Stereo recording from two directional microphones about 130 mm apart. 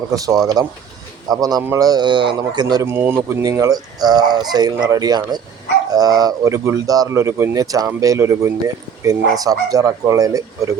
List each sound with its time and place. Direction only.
0.6 s speech: 30° right (ahead or behind)
2.8 s speech: 15° right (ahead or behind)
3.4 s speech: 25° right (ahead or behind)